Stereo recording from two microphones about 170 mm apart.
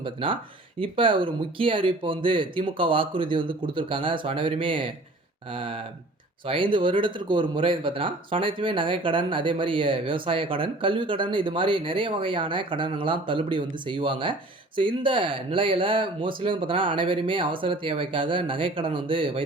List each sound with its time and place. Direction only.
0.0 s speech: 30° right (ahead or behind)